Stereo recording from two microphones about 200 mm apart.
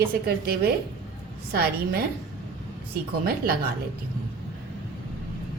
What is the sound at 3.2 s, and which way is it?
Speech, 50° right (ahead or behind).